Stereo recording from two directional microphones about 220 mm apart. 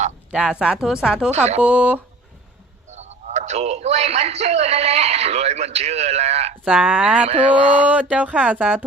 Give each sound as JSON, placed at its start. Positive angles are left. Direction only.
{"t": 0.3, "sound": "speech", "side_deg": -5}
{"t": 2.9, "sound": "a man's voice", "side_deg": -30}
{"t": 6.7, "sound": "speech", "side_deg": -5}
{"t": 7.3, "sound": "speech", "side_deg": -35}
{"t": 7.9, "sound": "speech", "side_deg": -5}